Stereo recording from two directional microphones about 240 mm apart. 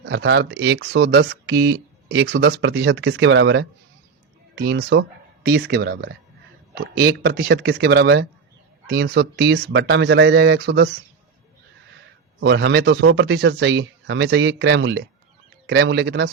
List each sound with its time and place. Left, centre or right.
0.0 s speech: right
12.4 s speech: right